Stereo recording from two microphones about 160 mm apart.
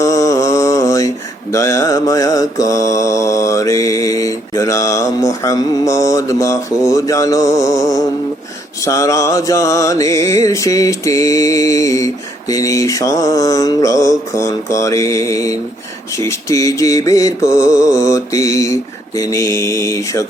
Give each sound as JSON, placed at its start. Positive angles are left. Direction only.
{"t": 0.0, "sound": "mantra", "side_deg": 20}
{"t": 8.8, "sound": "music", "side_deg": 20}